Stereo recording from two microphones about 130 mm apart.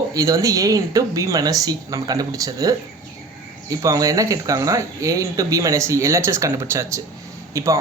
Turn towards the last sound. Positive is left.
turn(degrees=-25)  # may be behind; listen again after turning